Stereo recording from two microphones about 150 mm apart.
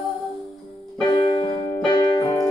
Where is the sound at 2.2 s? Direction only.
20° left (ahead or behind).